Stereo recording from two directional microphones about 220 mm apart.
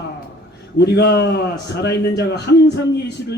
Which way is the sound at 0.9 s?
50° left (ahead or behind).